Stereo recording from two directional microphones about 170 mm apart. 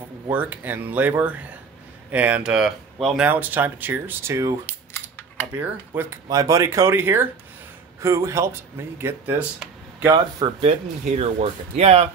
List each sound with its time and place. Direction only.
0.3 s speech: 10° right (ahead or behind)
4.6 s a sound: 15° left (ahead or behind)
5.5 s speech: 15° right (ahead or behind)
10.1 s speech: 35° right (ahead or behind)